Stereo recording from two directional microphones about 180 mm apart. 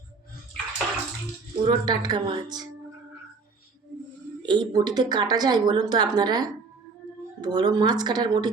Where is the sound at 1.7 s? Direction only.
25° right (ahead or behind).